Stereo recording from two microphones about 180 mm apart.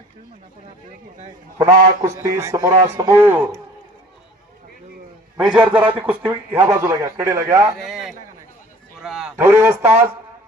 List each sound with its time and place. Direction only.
1.5 s speech: 15° right (ahead or behind)
5.5 s speech: 10° right (ahead or behind)
7.9 s a sound: centre (ahead or behind)
9.0 s a man's voice: 5° right (ahead or behind)